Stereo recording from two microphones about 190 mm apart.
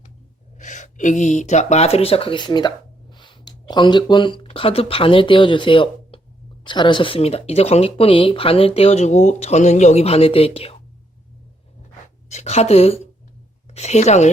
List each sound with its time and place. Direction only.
0.6 s speech: 40° left (ahead or behind)
12.3 s speech: 35° left (ahead or behind)